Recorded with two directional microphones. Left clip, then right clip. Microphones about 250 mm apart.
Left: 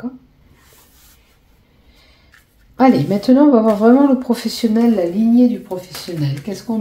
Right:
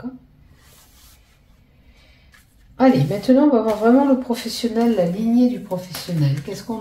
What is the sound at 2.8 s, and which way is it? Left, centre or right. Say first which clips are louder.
Speech: left 3 dB; left.